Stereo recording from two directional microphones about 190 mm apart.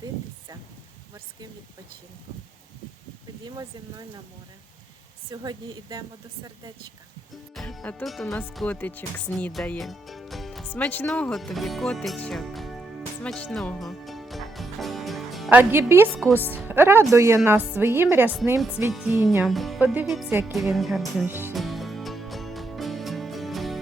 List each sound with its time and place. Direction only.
3.4 s speech: 20° right (ahead or behind)
5.3 s speech: 20° right (ahead or behind)
7.5 s speech: centre (ahead or behind)
13.2 s music: 5° left (ahead or behind); by 16.6 s 10° right (ahead or behind)
16.6 s a woman's voice: 10° right (ahead or behind)
21.2 s a woman's voice: 10° right (ahead or behind)
21.5 s music: centre (ahead or behind)